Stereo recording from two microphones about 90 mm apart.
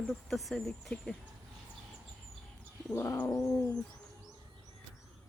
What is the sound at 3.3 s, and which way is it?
Owl, 35° left (ahead or behind).